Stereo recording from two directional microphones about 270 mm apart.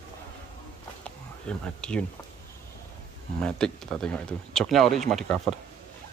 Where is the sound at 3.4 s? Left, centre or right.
Centre.